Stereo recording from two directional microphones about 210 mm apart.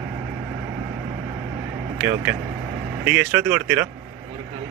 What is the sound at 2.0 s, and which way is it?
Speech, 10° right (ahead or behind).